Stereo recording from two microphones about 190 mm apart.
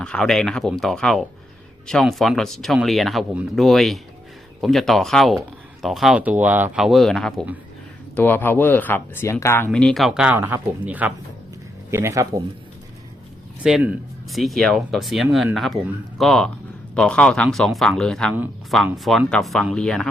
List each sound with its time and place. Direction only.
0.0 s speech: 5° left (ahead or behind); by 12.4 s 15° right (ahead or behind)
13.6 s speech: 5° right (ahead or behind)